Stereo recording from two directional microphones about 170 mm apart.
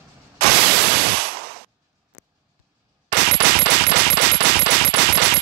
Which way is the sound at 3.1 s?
70° right (ahead or behind).